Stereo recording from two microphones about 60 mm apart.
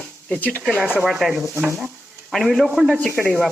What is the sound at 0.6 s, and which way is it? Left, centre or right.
Stir, centre.